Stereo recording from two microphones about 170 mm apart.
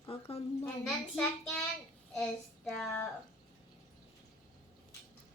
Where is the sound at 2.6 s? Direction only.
Centre (ahead or behind).